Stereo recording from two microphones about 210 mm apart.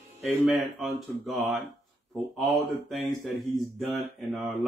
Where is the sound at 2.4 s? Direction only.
Centre (ahead or behind).